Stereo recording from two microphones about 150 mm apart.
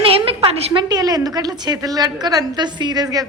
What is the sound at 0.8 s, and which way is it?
A woman's voice, 25° right (ahead or behind).